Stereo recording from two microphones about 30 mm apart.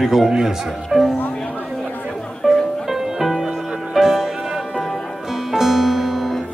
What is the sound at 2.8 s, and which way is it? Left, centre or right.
Music, centre.